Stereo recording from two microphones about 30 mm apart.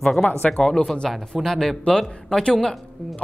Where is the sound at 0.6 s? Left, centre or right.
Centre.